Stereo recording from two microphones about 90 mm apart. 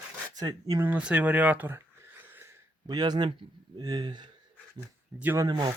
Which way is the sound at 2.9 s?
50° right (ahead or behind).